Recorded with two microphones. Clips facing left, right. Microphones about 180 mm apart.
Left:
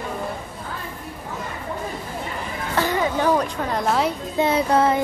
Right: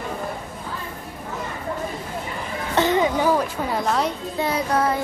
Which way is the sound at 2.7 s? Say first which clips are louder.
Right 3 dB; 20° right (ahead or behind).